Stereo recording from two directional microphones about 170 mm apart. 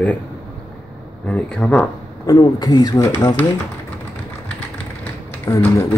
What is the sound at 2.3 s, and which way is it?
Speech, 25° left (ahead or behind).